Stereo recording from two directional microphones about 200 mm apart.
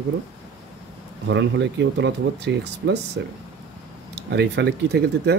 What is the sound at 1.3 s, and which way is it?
Speech, 60° right (ahead or behind).